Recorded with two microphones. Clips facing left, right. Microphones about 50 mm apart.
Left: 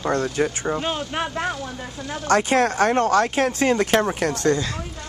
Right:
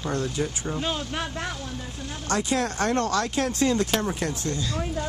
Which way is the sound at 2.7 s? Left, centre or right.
Left.